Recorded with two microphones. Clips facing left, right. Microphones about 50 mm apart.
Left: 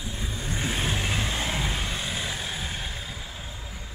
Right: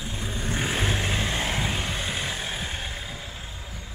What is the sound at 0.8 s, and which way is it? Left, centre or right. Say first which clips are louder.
Vehicle: right 2 dB; centre.